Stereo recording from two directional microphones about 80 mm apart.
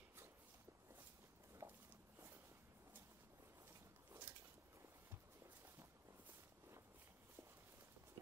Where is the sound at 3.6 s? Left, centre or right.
Right.